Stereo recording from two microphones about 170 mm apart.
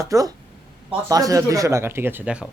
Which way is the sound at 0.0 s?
20° right (ahead or behind).